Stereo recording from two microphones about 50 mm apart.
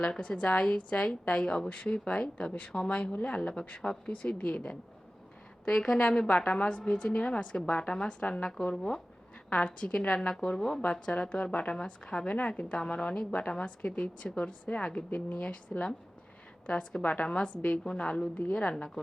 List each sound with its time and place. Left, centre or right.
0.0 s a woman's voice: centre
11.0 s a woman's voice: left
17.2 s a woman's voice: left